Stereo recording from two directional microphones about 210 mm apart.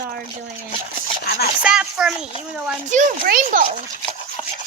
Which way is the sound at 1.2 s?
45° left (ahead or behind).